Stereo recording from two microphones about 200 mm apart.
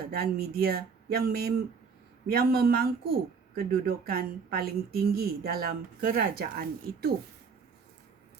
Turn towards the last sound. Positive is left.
turn(degrees=-50)  # may be behind; listen again after turning